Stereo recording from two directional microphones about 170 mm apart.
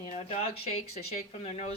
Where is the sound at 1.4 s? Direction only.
40° left (ahead or behind).